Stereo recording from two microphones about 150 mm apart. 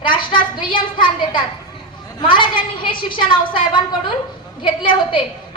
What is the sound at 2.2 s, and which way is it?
A woman's voice, 35° left (ahead or behind).